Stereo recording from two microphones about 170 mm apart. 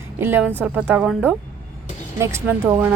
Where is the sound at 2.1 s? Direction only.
15° right (ahead or behind).